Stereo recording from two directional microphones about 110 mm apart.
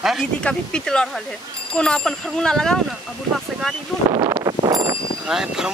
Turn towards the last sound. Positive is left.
turn(degrees=-5)  # may be behind; listen again after turning